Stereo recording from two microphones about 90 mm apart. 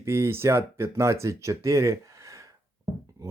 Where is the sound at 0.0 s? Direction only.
30° right (ahead or behind).